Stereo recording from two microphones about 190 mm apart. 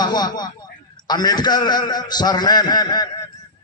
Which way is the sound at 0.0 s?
20° left (ahead or behind).